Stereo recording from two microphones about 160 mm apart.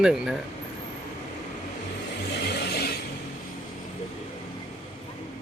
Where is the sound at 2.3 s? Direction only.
90° left.